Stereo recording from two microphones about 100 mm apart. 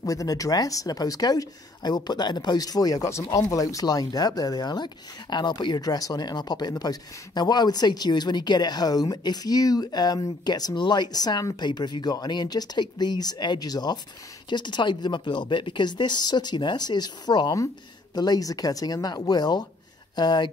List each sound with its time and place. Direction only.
0.0 s speech: 35° left (ahead or behind)